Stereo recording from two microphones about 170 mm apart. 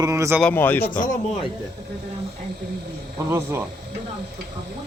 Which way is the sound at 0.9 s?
50° left (ahead or behind).